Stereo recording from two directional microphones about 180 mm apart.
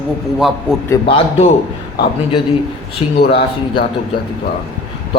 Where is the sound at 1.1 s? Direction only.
30° left (ahead or behind).